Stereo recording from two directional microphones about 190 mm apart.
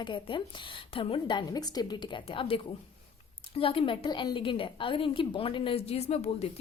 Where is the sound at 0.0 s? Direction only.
25° left (ahead or behind).